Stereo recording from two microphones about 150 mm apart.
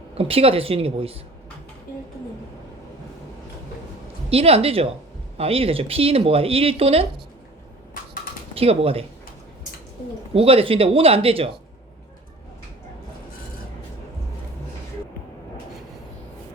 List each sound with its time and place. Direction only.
0.1 s speech: 40° right (ahead or behind)
4.3 s speech: 40° right (ahead or behind)
8.5 s speech: 40° right (ahead or behind)
10.3 s speech: 40° right (ahead or behind)